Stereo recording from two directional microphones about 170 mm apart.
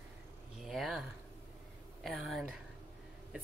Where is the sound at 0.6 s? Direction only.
Centre (ahead or behind).